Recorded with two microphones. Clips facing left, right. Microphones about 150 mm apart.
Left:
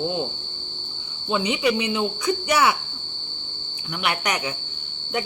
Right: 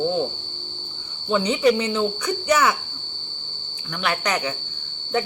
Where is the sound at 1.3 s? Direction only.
15° left (ahead or behind).